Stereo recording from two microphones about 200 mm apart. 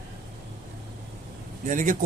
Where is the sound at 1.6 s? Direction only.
40° right (ahead or behind).